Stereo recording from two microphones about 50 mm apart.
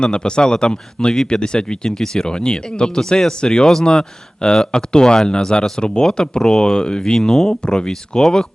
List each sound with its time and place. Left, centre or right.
0.0 s speech: centre